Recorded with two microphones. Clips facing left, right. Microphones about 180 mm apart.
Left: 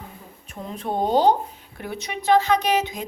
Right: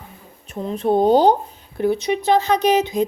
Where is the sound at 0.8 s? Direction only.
35° right (ahead or behind).